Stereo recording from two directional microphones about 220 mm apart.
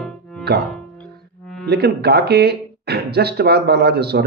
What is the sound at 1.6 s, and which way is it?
Speech, 50° right (ahead or behind).